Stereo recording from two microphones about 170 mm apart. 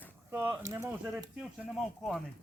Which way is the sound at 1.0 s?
5° right (ahead or behind).